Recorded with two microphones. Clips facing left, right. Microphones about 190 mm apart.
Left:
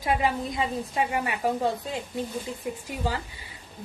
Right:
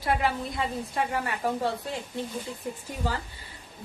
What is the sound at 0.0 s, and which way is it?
A woman's voice, 15° left (ahead or behind).